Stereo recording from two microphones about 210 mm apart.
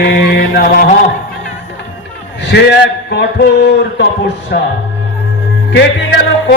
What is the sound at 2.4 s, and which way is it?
A man's voice, 55° left (ahead or behind).